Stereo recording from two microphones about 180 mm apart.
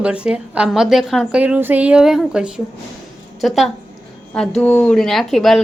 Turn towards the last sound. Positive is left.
turn(degrees=0)  # may be behind; listen again after turning